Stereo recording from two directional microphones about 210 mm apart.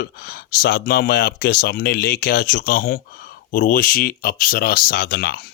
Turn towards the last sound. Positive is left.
turn(degrees=50)  # may be behind; listen again after turning